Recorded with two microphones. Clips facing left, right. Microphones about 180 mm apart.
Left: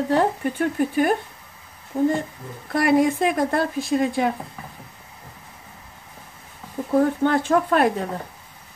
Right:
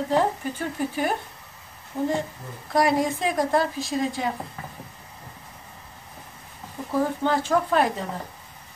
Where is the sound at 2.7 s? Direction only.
60° left (ahead or behind).